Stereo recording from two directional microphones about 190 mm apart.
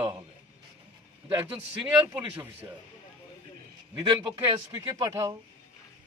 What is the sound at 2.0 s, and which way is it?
Speech, 10° right (ahead or behind).